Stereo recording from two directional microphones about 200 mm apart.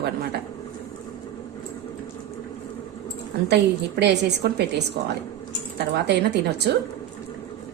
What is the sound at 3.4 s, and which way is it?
A woman's voice, 60° right (ahead or behind).